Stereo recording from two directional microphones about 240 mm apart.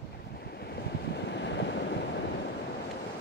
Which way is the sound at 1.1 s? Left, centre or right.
Left.